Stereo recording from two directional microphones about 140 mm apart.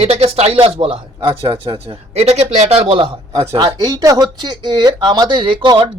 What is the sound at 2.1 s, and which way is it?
Speech, 50° right (ahead or behind).